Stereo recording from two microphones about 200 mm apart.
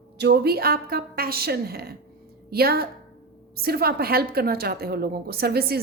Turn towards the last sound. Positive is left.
turn(degrees=-50)  # may be behind; listen again after turning